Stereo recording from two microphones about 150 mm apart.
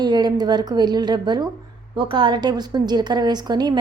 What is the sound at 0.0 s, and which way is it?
A woman's voice, 30° right (ahead or behind).